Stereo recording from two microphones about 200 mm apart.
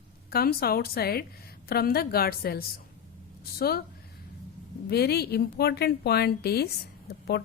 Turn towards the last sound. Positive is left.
turn(degrees=55)  # may be behind; listen again after turning